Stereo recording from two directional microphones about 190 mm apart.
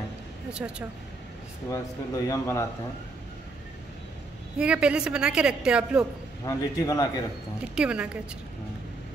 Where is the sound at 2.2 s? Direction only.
15° left (ahead or behind).